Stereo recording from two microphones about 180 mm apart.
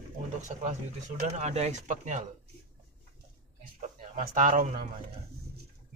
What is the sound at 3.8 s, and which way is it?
A man's voice, 50° right (ahead or behind).